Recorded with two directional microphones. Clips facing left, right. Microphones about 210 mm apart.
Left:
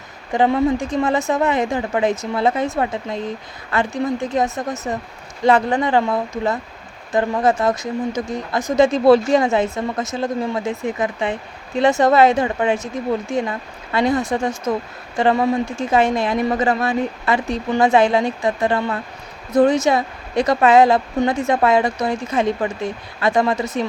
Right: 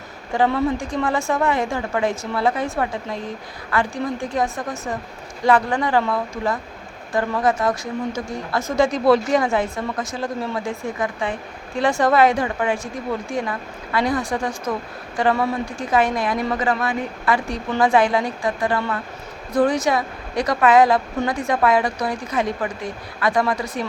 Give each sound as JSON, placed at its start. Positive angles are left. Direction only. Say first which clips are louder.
{"t": 0.3, "sound": "speech", "louder": "left 3 dB", "side_deg": 20}